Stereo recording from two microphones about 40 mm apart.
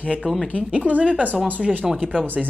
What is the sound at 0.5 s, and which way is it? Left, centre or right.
Speech, right.